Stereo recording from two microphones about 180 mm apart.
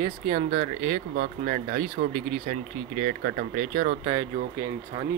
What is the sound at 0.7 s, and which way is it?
Speech, 40° right (ahead or behind).